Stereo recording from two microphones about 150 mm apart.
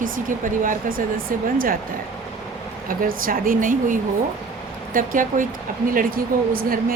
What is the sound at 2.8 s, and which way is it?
A woman's voice, 70° right (ahead or behind).